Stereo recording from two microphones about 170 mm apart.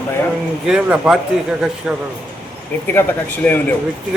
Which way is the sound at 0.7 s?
5° right (ahead or behind).